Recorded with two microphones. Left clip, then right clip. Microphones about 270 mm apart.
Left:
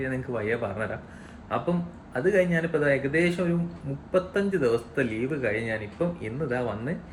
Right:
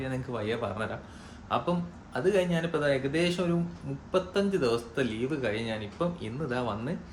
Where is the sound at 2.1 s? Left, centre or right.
Centre.